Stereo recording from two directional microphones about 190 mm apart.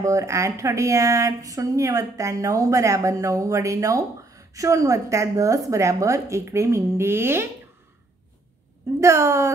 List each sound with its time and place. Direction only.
0.0 s speech: 15° right (ahead or behind)
9.0 s speech: 15° right (ahead or behind)